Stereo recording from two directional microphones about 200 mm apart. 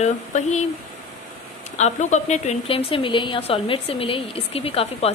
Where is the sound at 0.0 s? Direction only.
35° left (ahead or behind).